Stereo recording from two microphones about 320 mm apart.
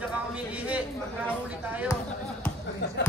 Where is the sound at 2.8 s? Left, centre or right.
Left.